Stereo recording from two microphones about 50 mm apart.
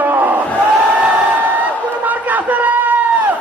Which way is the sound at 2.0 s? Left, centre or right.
Right.